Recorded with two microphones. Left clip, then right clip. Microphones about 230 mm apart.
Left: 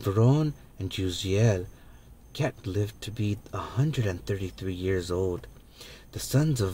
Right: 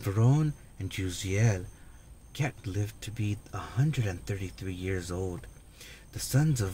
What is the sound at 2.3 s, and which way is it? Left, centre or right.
Speech, right.